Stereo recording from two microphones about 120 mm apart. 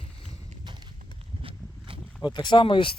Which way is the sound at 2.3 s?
40° left (ahead or behind).